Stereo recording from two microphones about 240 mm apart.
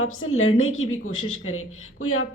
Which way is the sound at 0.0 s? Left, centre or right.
Left.